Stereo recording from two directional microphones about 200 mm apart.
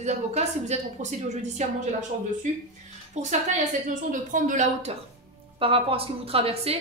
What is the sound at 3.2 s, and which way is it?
A woman's voice, 35° right (ahead or behind).